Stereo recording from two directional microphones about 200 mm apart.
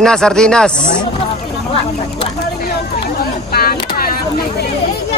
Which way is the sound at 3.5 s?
50° left (ahead or behind).